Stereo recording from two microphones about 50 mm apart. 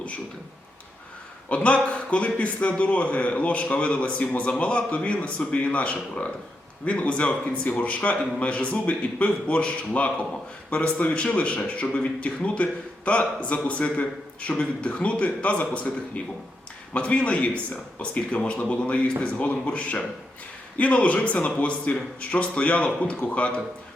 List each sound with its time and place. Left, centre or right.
1.5 s a man's voice: left